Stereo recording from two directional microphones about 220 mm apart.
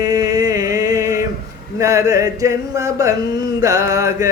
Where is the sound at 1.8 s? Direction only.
15° right (ahead or behind).